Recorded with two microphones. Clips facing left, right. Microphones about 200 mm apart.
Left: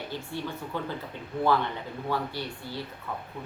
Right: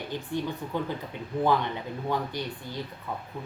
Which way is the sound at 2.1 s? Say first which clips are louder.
Right 1 dB; 15° right (ahead or behind).